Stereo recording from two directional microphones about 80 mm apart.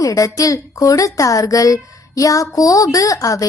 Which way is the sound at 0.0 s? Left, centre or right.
Left.